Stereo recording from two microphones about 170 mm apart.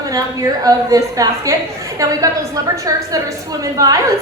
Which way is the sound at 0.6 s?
20° right (ahead or behind).